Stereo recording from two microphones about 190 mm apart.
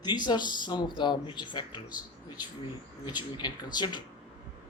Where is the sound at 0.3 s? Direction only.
25° left (ahead or behind).